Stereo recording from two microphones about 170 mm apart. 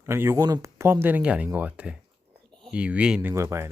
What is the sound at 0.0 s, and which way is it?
Speech, 15° right (ahead or behind).